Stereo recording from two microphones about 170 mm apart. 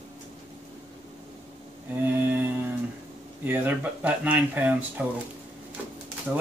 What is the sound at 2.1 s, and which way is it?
Speech, 10° right (ahead or behind).